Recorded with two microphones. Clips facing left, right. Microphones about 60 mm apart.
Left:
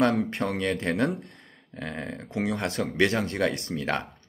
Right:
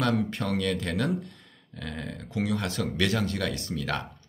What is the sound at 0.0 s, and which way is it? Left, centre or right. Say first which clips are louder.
Speech: left 3 dB; left.